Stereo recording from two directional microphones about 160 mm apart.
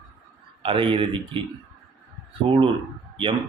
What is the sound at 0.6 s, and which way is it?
Speech, 30° right (ahead or behind).